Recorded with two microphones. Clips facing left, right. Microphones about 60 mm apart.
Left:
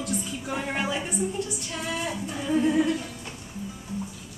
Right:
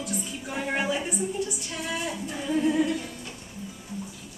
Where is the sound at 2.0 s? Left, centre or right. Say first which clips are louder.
Left 1 dB; centre.